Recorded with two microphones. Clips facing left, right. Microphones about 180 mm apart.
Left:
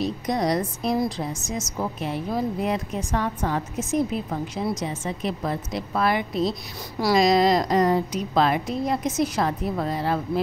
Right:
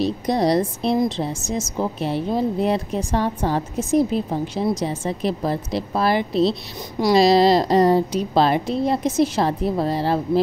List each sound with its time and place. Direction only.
0.0 s a woman's voice: 30° right (ahead or behind)